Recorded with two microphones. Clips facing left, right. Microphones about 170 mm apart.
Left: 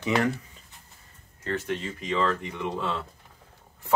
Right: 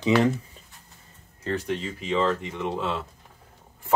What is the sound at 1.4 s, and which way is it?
Speech, 10° right (ahead or behind).